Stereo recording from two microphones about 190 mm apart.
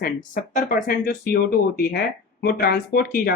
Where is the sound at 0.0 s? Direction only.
45° left (ahead or behind).